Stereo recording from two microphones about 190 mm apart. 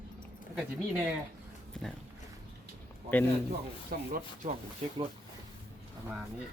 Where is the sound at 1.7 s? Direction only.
Centre (ahead or behind).